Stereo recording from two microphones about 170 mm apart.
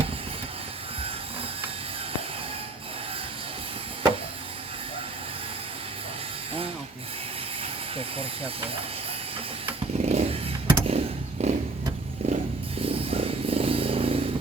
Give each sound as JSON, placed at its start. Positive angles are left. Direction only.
{"t": 7.6, "sound": "speech", "side_deg": -35}
{"t": 9.6, "sound": "chainsaw", "side_deg": -35}
{"t": 11.4, "sound": "vehicle", "side_deg": -35}
{"t": 12.2, "sound": "a sound", "side_deg": -40}